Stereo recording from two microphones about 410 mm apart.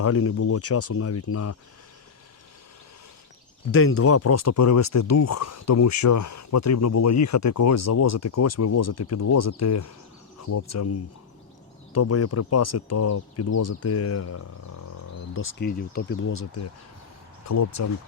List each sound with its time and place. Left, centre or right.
0.0 s speech: left
3.7 s speech: left
11.9 s speech: left
17.4 s speech: left